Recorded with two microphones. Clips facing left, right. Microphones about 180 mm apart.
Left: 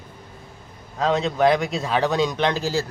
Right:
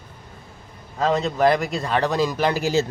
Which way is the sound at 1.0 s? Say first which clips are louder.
Even; centre (ahead or behind).